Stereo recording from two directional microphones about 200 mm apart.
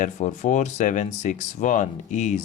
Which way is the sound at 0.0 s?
35° left (ahead or behind).